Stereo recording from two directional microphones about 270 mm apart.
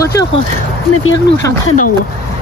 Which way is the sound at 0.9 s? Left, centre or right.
Left.